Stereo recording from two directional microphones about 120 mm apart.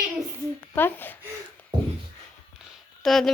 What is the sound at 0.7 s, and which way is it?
Speech, 15° left (ahead or behind).